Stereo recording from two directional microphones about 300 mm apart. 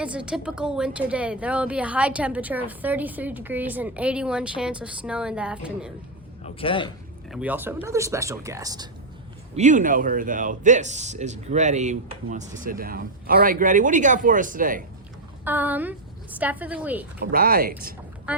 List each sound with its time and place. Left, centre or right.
0.0 s a woman's voice: centre
6.4 s a man's voice: centre
7.3 s speech: centre
9.6 s speech: right
15.4 s a woman's voice: centre
17.2 s speech: right
18.3 s duck: centre